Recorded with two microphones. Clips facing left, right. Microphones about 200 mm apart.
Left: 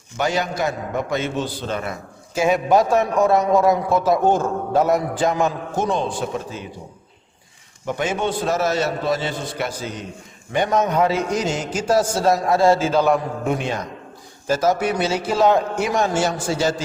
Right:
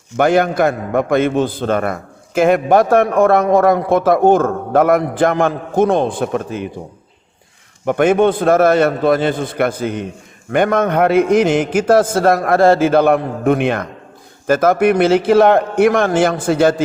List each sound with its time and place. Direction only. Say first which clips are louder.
0.2 s a man's voice: right 9 dB; 55° right (ahead or behind)
7.9 s a man's voice: right 10 dB; 55° right (ahead or behind)